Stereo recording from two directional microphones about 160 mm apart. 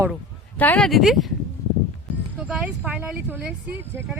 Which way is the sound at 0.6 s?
5° left (ahead or behind).